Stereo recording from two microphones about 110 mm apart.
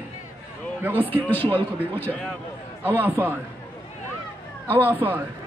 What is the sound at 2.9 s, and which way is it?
Speech, 20° right (ahead or behind).